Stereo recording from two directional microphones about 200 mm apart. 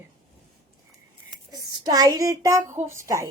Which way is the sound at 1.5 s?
20° right (ahead or behind).